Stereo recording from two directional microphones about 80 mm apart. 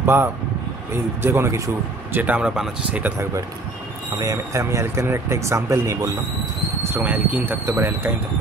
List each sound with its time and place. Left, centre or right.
0.0 s speech: right
2.1 s speech: centre
4.2 s speech: right
7.0 s speech: right